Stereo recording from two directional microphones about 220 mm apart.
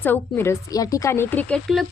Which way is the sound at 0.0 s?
10° left (ahead or behind).